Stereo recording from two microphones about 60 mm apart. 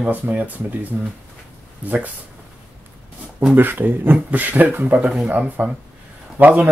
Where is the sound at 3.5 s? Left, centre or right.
Right.